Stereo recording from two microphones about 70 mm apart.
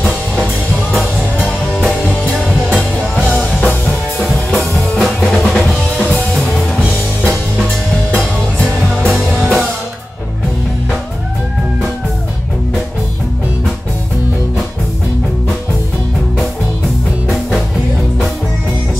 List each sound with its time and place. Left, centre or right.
0.9 s music: centre
9.0 s music: centre